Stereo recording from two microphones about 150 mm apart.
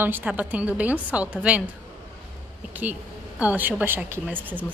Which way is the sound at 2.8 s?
10° right (ahead or behind).